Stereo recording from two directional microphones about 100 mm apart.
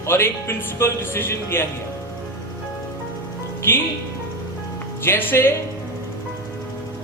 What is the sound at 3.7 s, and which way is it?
Speech, 20° left (ahead or behind).